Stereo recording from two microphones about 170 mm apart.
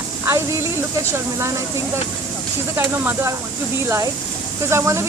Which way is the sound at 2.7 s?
15° right (ahead or behind).